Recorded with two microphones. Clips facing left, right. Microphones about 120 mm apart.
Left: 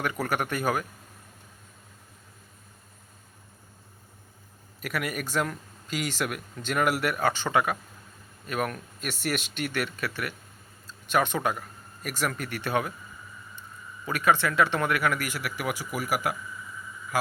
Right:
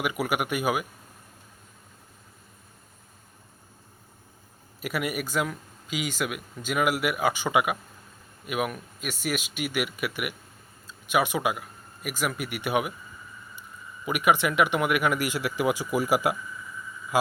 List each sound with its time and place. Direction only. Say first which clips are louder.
0.0 s speech: right 1 dB; 10° right (ahead or behind)
4.8 s a man's voice: right 2 dB; 10° right (ahead or behind)